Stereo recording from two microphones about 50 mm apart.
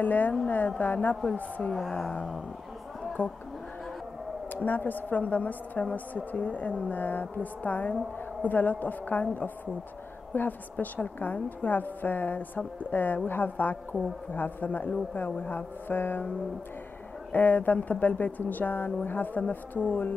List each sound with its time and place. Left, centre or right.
0.0 s a woman's voice: left
1.7 s speech: centre
3.2 s a woman's voice: left
4.5 s a woman's voice: left
10.3 s a woman's voice: left
17.3 s a woman's voice: left